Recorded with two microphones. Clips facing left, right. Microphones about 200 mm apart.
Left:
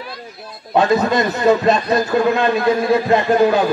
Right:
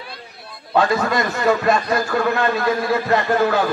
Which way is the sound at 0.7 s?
20° left (ahead or behind).